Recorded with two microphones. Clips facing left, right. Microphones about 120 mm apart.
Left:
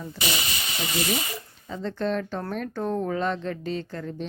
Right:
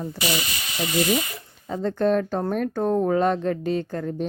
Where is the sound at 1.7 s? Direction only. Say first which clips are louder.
Right 6 dB; 45° right (ahead or behind).